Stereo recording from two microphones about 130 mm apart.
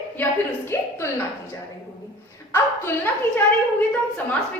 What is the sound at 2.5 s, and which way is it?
Speech, 15° left (ahead or behind).